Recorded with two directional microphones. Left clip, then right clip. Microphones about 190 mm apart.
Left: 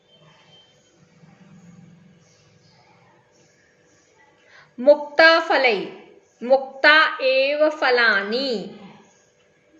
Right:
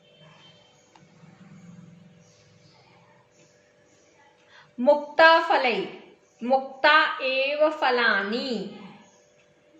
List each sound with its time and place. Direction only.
4.5 s a woman's voice: 15° left (ahead or behind)